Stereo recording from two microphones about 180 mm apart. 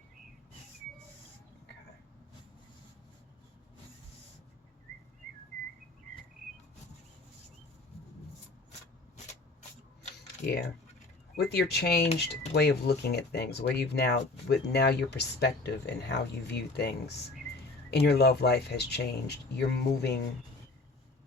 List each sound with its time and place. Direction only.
10.4 s speech: 70° left (ahead or behind)